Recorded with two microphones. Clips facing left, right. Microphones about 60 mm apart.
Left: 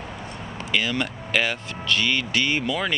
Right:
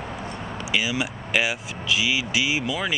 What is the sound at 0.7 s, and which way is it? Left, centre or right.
Speech, centre.